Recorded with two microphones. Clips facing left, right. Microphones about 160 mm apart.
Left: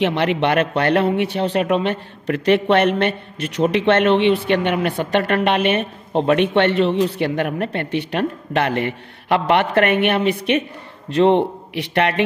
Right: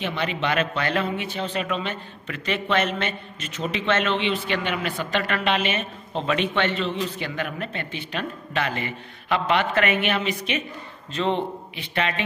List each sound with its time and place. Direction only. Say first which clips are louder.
0.0 s a woman's voice: left 9 dB; 75° left (ahead or behind)